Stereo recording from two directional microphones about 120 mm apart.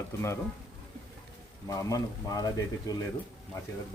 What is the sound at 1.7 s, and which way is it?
Speech, 30° left (ahead or behind).